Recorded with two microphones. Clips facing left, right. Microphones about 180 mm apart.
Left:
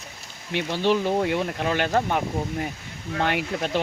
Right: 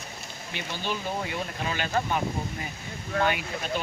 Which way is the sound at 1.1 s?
65° left (ahead or behind).